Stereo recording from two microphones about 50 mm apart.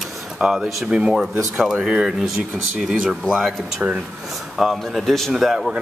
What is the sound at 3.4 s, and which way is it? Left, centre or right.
Speech, centre.